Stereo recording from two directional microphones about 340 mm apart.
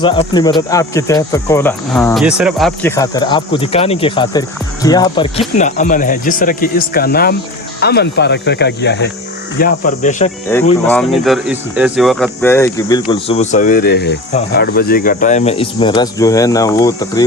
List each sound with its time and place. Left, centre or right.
0.0 s speech: centre
10.8 s speech: centre